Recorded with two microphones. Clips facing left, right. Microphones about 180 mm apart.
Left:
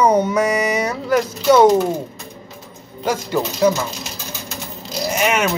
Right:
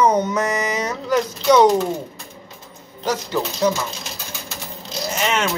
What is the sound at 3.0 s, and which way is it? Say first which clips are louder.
Speech: left 2 dB; 10° left (ahead or behind).